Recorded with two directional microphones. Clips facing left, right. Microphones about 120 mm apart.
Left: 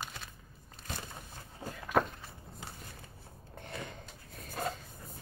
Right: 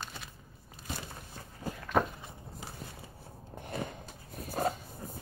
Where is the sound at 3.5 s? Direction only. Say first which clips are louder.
Right 3 dB; 45° right (ahead or behind).